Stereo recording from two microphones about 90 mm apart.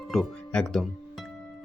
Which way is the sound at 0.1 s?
5° left (ahead or behind).